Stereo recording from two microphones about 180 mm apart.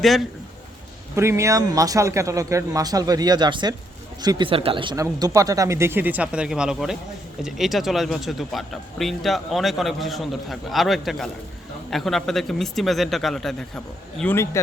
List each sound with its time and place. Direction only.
1.1 s a man's voice: 15° right (ahead or behind); by 14.6 s 10° left (ahead or behind)